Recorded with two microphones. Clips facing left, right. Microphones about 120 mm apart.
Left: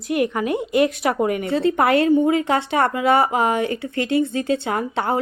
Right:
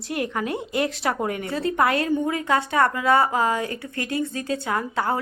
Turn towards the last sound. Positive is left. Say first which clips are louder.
# left 2 dB
turn(degrees=25)  # may be behind; listen again after turning